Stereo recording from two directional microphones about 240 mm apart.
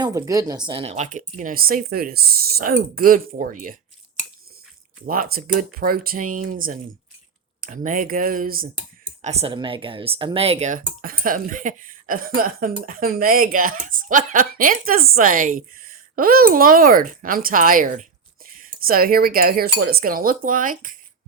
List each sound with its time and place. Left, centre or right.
0.0 s speech: centre; by 3.8 s right
5.0 s speech: right
9.2 s speech: right